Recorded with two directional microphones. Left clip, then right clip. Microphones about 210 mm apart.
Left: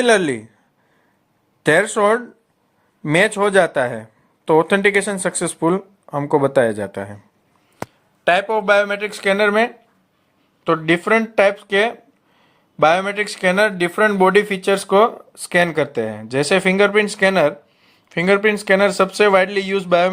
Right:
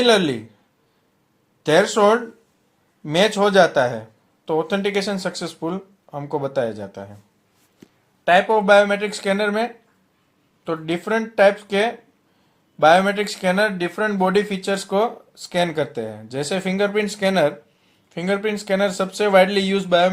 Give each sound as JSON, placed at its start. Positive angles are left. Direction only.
{"t": 0.0, "sound": "speech", "side_deg": 35}
{"t": 1.6, "sound": "speech", "side_deg": 35}
{"t": 8.2, "sound": "speech", "side_deg": 35}